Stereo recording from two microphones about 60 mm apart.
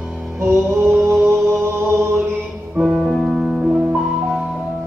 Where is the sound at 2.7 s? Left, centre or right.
Centre.